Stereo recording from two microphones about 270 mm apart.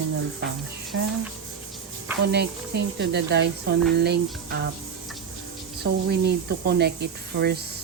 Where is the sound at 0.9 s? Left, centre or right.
Right.